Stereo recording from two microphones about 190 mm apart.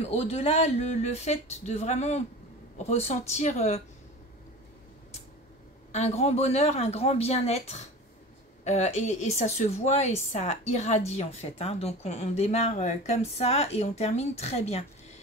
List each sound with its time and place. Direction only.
0.1 s a woman's voice: 35° left (ahead or behind)
5.9 s a woman's voice: 35° left (ahead or behind)